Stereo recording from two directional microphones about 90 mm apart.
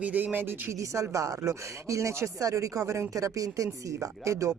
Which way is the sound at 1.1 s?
40° right (ahead or behind).